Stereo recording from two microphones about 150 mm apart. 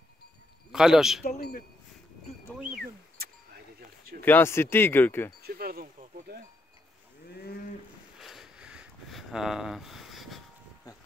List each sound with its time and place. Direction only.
0.7 s speech: 5° right (ahead or behind)
2.7 s a sound: 90° right
4.2 s speech: 15° left (ahead or behind)
5.4 s speech: 85° right
7.2 s livestock: 90° left
8.2 s a sound: centre (ahead or behind)